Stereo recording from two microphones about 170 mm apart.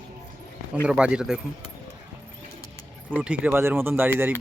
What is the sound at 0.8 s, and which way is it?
Speech, 5° right (ahead or behind).